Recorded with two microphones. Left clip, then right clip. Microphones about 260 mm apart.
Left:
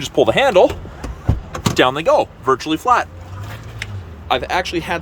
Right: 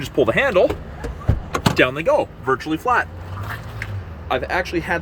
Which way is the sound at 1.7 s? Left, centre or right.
Centre.